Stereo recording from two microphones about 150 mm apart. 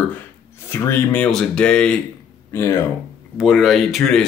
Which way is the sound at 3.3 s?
Centre (ahead or behind).